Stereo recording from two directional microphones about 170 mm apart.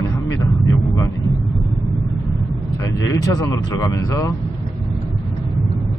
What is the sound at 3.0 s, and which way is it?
A man's voice, 20° left (ahead or behind).